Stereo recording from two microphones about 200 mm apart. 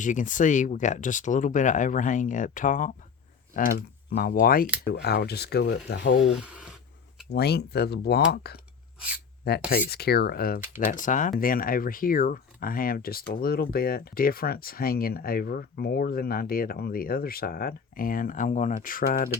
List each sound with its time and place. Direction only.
0.0 s speech: 40° left (ahead or behind); by 6.2 s 60° left (ahead or behind)
6.2 s speech: 5° right (ahead or behind)
7.3 s speech: 55° left (ahead or behind)
9.6 s speech: 50° left (ahead or behind)